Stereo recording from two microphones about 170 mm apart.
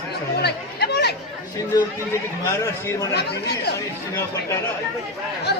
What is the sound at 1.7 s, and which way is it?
A man's voice, 20° left (ahead or behind).